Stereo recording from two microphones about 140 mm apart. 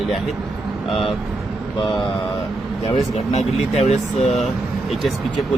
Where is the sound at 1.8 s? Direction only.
35° left (ahead or behind).